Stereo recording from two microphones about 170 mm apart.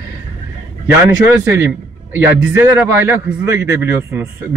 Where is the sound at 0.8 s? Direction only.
15° right (ahead or behind).